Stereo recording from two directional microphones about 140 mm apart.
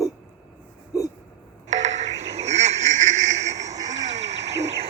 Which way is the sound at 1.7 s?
55° right (ahead or behind).